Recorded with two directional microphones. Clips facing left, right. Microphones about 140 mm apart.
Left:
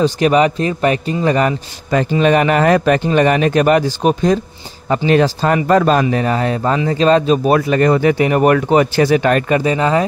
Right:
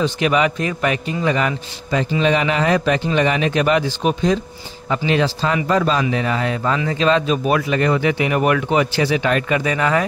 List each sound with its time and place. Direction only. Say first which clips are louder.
0.0 s a man's voice: left 5 dB; 40° left (ahead or behind)
9.6 s speech: left 4 dB; 30° left (ahead or behind)